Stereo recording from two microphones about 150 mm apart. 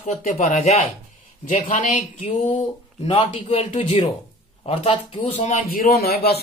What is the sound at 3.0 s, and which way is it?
Speech, 35° left (ahead or behind).